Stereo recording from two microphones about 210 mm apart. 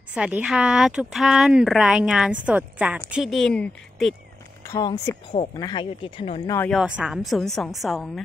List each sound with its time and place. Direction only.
0.1 s a woman's voice: 5° right (ahead or behind)
4.6 s speech: 15° left (ahead or behind)
6.7 s speech: 5° right (ahead or behind)